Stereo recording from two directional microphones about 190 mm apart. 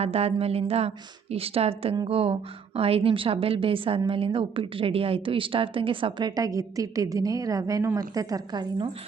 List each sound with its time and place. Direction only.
0.0 s a woman's voice: 30° right (ahead or behind)